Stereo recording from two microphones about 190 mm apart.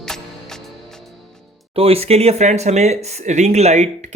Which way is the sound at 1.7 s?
30° right (ahead or behind).